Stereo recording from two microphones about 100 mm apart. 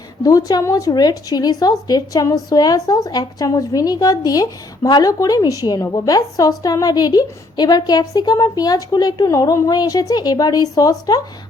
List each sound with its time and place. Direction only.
0.2 s a woman's voice: 35° left (ahead or behind)